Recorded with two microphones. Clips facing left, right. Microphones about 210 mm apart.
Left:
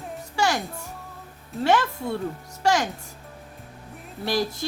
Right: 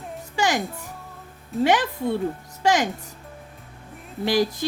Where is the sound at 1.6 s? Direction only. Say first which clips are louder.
Right 2 dB; 15° right (ahead or behind).